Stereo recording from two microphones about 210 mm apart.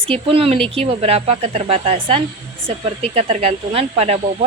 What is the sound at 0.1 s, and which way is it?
Speech, 25° right (ahead or behind).